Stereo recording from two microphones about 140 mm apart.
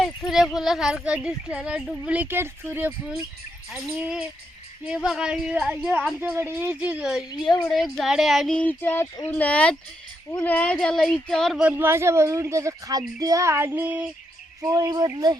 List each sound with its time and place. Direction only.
0.0 s speech: centre (ahead or behind)
2.1 s speech: 15° right (ahead or behind)
6.1 s speech: 15° right (ahead or behind)
7.4 s speech: 30° left (ahead or behind)
7.7 s speech: centre (ahead or behind)
11.6 s a woman's voice: 15° right (ahead or behind)
14.7 s a woman's voice: 25° right (ahead or behind)